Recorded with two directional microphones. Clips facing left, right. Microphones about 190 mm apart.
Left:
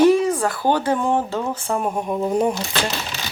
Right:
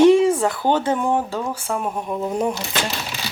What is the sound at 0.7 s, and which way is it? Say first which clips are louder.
Speech: left 1 dB; 20° right (ahead or behind).